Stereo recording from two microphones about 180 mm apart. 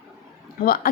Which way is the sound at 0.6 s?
55° left (ahead or behind).